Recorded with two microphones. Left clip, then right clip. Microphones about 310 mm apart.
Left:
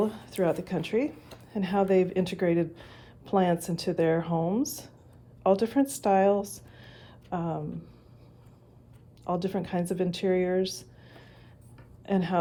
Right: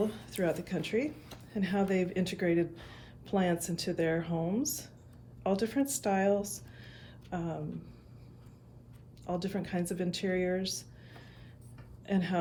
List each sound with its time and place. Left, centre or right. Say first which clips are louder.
0.1 s a woman's voice: left 5 dB; centre
9.2 s a woman's voice: left 6 dB; centre
12.0 s a woman's voice: left 6 dB; left